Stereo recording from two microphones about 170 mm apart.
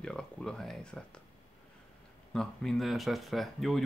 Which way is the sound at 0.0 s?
5° left (ahead or behind).